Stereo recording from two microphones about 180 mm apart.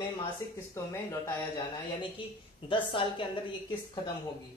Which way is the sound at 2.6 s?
30° left (ahead or behind).